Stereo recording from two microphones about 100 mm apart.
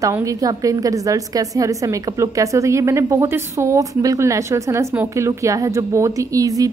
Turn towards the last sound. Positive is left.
turn(degrees=-35)  # may be behind; listen again after turning